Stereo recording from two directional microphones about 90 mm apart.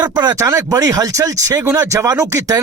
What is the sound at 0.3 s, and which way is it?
Speech, 35° right (ahead or behind).